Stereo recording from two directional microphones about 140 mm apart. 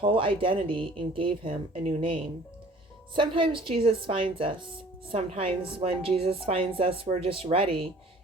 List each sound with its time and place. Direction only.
0.0 s a woman's voice: 40° right (ahead or behind)